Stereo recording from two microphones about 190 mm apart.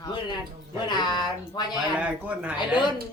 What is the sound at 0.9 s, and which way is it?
Speech, 20° left (ahead or behind).